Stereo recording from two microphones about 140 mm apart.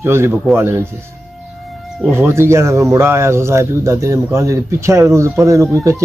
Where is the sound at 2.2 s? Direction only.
15° right (ahead or behind).